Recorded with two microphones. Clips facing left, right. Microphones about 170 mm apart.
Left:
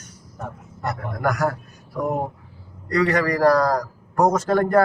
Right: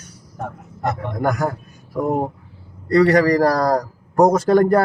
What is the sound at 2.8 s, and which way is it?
Speech, 35° right (ahead or behind).